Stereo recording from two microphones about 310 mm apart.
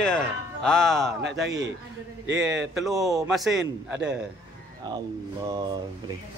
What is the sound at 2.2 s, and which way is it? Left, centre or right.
Speech, right.